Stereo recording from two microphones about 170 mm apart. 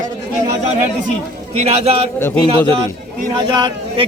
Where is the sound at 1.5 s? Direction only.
35° right (ahead or behind).